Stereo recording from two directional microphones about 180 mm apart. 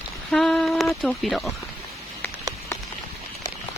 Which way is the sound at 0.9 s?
5° left (ahead or behind).